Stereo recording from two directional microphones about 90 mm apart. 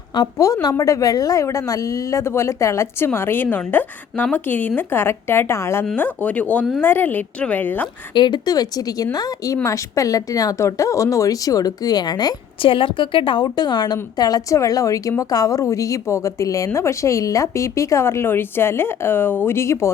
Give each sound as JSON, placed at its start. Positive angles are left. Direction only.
{"t": 0.3, "sound": "a woman's voice", "side_deg": 40}
{"t": 6.0, "sound": "a woman's voice", "side_deg": 15}
{"t": 8.1, "sound": "a woman's voice", "side_deg": 60}
{"t": 12.6, "sound": "a woman's voice", "side_deg": 70}